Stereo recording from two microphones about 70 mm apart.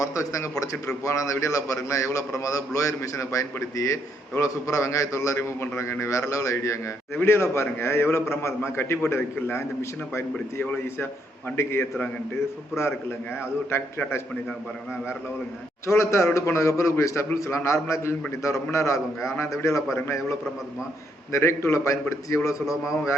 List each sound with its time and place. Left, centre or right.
0.0 s a man's voice: left
15.9 s a man's voice: left
21.3 s a man's voice: left